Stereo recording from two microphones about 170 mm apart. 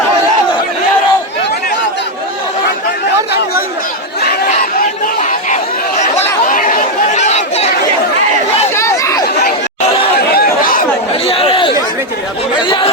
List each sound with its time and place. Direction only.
4.2 s chatter: 50° left (ahead or behind)
8.7 s a sound: 15° left (ahead or behind)
10.2 s chatter: 65° left (ahead or behind)
11.3 s chatter: 35° left (ahead or behind)